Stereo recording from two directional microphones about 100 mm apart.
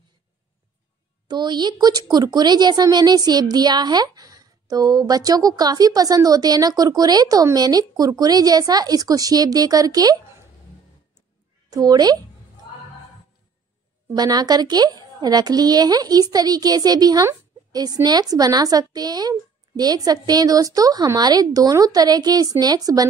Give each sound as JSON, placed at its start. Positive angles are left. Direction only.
{"t": 1.2, "sound": "a woman's voice", "side_deg": -45}
{"t": 11.7, "sound": "a woman's voice", "side_deg": -40}
{"t": 14.1, "sound": "a woman's voice", "side_deg": -40}